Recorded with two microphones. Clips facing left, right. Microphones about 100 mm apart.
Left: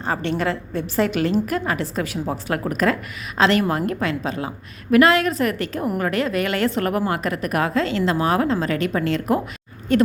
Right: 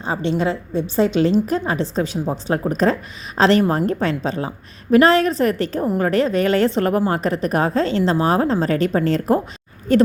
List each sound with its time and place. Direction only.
0.0 s a woman's voice: 20° right (ahead or behind); by 10.0 s 35° right (ahead or behind)